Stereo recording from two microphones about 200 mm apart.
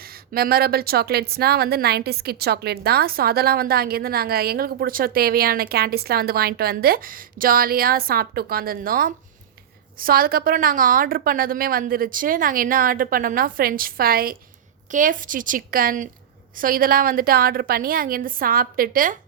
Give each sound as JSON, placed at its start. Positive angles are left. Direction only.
{"t": 0.0, "sound": "a woman's voice", "side_deg": -50}